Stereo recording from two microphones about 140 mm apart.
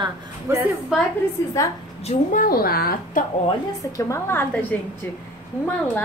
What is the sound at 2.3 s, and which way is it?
Speech, 85° left.